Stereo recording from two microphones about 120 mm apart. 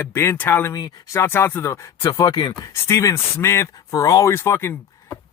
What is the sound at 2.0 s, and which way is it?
Speech, 35° left (ahead or behind).